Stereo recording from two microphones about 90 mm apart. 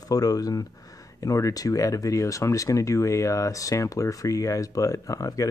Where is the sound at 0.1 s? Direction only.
45° left (ahead or behind).